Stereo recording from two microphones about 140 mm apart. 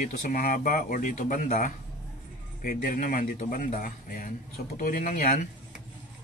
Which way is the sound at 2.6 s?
80° left.